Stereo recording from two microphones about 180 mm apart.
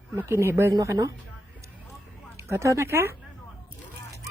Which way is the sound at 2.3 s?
15° right (ahead or behind).